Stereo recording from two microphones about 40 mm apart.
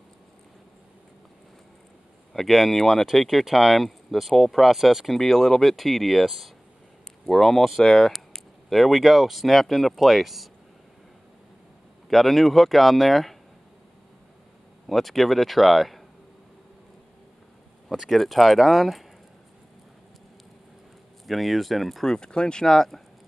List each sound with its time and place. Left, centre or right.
2.3 s speech: centre
12.1 s speech: centre
14.9 s speech: centre
17.9 s speech: centre
21.3 s speech: centre
22.0 s speech: centre
22.7 s speech: centre